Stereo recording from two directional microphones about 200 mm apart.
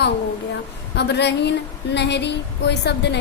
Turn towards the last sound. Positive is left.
turn(degrees=60)  # may be behind; listen again after turning